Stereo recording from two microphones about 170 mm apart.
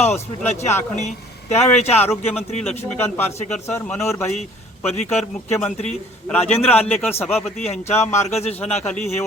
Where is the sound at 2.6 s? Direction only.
15° left (ahead or behind).